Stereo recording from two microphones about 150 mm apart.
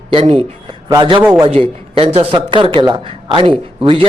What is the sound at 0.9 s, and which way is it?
Speech, 30° right (ahead or behind).